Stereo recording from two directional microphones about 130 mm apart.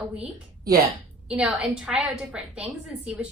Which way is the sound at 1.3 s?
10° right (ahead or behind).